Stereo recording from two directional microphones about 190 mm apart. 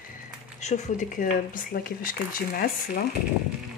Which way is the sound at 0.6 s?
35° left (ahead or behind).